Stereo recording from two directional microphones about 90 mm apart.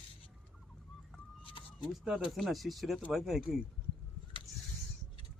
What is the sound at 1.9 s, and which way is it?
Speech, 5° right (ahead or behind).